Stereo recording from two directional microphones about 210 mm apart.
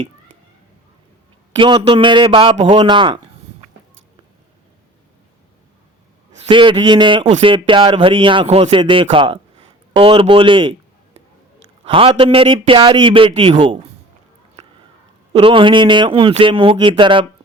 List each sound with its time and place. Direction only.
1.5 s speech: 25° right (ahead or behind)
6.3 s a man's voice: 25° right (ahead or behind)
15.3 s speech: 25° right (ahead or behind)